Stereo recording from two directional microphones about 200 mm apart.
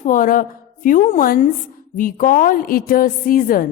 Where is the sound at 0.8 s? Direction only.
40° left (ahead or behind).